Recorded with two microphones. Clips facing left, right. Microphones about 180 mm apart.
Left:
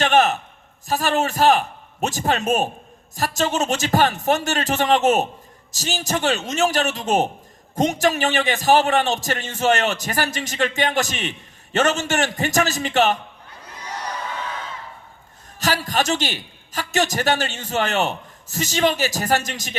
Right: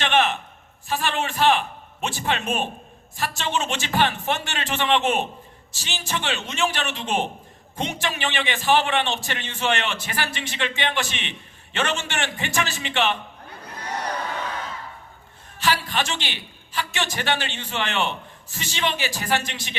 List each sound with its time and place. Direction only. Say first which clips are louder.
0.0 s a sound: left 4 dB; 40° left (ahead or behind)
0.9 s a man's voice: left 5 dB; 40° left (ahead or behind)
15.5 s a woman's voice: left 2 dB; 40° left (ahead or behind)